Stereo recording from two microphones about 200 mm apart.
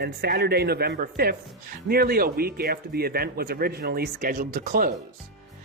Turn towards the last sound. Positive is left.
turn(degrees=-45)  # may be behind; listen again after turning